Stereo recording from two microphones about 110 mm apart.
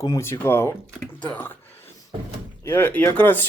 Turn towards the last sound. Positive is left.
turn(degrees=15)  # may be behind; listen again after turning